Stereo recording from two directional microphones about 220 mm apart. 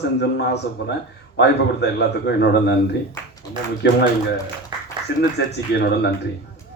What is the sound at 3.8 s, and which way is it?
Speech, 50° left (ahead or behind).